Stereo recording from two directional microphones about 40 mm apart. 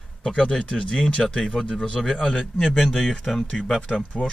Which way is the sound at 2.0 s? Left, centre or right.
Centre.